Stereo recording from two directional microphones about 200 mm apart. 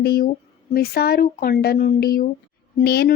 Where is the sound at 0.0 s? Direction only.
50° left (ahead or behind).